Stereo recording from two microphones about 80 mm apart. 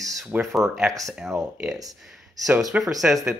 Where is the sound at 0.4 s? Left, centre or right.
Centre.